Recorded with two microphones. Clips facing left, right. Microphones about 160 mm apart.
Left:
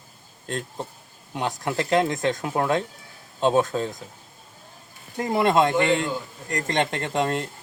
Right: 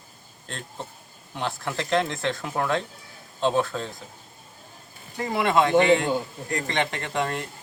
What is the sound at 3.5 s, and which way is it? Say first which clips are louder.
Speech: left 4 dB; 40° left (ahead or behind).